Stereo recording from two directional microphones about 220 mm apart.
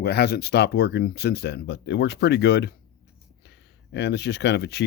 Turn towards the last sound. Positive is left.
turn(degrees=50)  # may be behind; listen again after turning